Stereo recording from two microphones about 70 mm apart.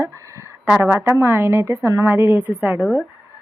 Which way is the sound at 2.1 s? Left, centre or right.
Right.